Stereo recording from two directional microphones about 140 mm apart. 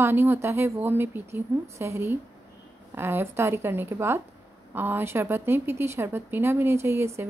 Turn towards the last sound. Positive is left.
turn(degrees=-20)  # may be behind; listen again after turning